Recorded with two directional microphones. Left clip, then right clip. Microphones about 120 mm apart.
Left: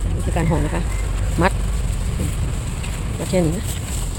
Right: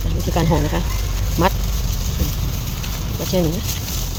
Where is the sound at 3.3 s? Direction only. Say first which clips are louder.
Even; 20° left (ahead or behind).